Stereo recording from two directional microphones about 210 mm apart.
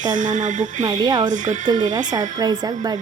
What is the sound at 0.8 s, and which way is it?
Speech, 20° right (ahead or behind).